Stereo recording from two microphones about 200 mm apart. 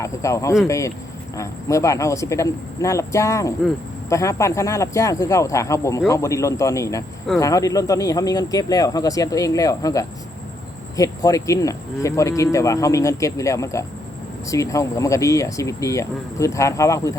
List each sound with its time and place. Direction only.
0.0 s speech: 15° left (ahead or behind)